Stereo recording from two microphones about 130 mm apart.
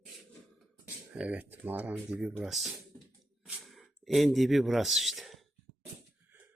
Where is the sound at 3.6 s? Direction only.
Centre (ahead or behind).